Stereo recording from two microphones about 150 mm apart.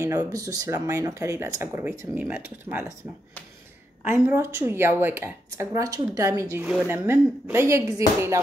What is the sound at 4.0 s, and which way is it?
Speech, 15° right (ahead or behind).